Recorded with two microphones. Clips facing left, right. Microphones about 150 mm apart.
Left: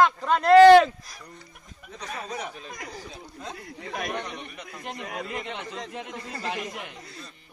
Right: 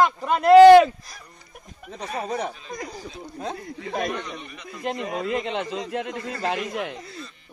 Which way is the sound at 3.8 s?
35° right (ahead or behind).